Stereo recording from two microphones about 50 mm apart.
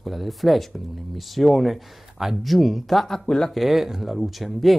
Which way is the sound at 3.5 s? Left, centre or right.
Centre.